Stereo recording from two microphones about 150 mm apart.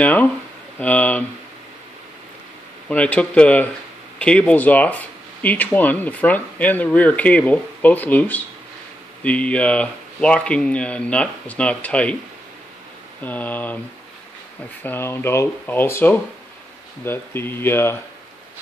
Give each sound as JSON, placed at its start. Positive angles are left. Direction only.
{"t": 0.0, "sound": "speech", "side_deg": 10}
{"t": 2.9, "sound": "speech", "side_deg": 10}
{"t": 13.2, "sound": "speech", "side_deg": 10}
{"t": 14.8, "sound": "speech", "side_deg": 15}